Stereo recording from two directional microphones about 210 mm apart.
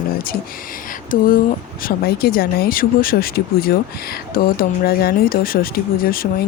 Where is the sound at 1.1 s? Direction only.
40° left (ahead or behind).